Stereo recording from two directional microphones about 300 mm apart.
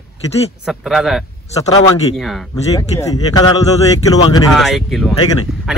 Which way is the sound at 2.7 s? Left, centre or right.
Centre.